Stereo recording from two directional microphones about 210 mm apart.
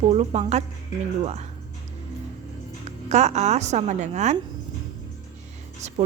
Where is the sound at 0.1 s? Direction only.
30° right (ahead or behind).